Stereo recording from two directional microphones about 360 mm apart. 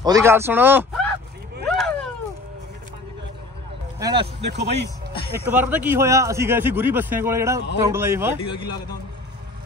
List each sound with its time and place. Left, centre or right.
0.0 s a man's voice: centre
1.7 s a sound: centre
4.0 s a man's voice: centre
4.4 s speech: right
5.3 s a man's voice: centre